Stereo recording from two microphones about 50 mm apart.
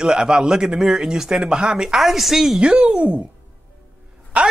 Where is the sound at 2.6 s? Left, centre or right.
Centre.